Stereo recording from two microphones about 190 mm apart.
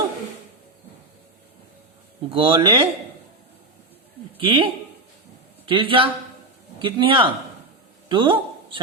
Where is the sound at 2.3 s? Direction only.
25° right (ahead or behind).